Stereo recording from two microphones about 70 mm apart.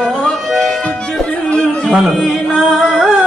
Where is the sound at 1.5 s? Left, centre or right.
Centre.